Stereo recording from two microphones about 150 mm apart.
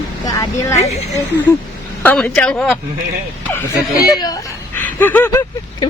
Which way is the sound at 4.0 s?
25° left (ahead or behind).